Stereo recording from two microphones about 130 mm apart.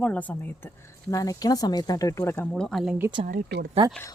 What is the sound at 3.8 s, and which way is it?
Speech, 40° right (ahead or behind).